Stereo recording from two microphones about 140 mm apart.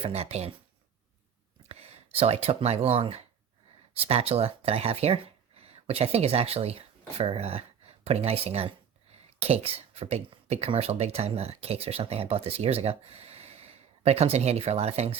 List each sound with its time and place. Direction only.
0.0 s speech: 45° right (ahead or behind)
1.6 s speech: 50° right (ahead or behind)